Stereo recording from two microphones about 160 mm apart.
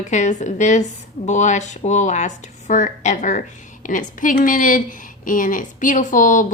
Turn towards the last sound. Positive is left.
turn(degrees=55)  # may be behind; listen again after turning